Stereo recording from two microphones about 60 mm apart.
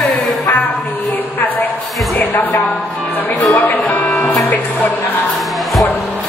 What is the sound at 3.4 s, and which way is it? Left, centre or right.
Music, left.